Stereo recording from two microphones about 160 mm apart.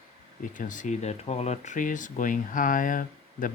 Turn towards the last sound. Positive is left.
turn(degrees=55)  # may be behind; listen again after turning